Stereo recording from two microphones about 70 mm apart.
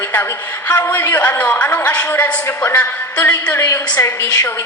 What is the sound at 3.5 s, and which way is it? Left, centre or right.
Speech, left.